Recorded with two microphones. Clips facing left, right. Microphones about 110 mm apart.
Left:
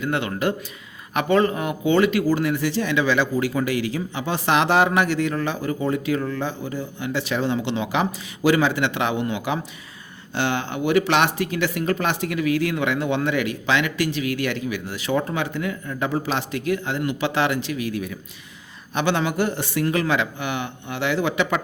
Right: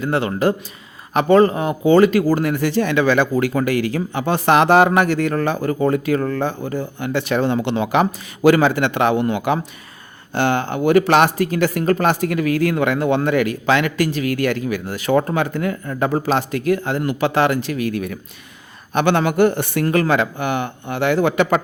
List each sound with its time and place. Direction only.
0.0 s a man's voice: 35° right (ahead or behind)